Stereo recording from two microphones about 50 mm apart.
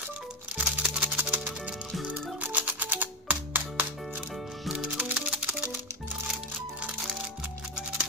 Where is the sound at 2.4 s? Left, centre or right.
Right.